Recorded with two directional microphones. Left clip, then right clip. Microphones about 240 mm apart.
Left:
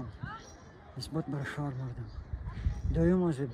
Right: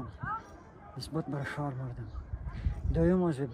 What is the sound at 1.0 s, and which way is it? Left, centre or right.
Speech, centre.